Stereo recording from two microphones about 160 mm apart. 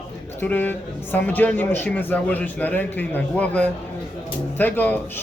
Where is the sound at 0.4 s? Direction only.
10° left (ahead or behind).